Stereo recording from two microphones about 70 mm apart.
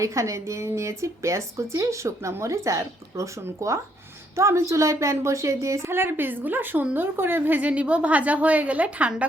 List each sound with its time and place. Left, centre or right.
0.0 s a woman's voice: right; by 9.2 s centre